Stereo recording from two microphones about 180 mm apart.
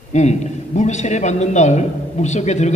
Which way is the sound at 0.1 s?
40° left (ahead or behind).